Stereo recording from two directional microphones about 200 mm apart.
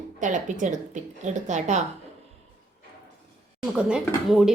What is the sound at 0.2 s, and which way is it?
A woman's voice, 40° right (ahead or behind).